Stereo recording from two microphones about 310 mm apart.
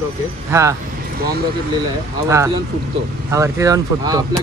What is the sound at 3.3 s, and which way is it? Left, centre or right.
Speech, centre.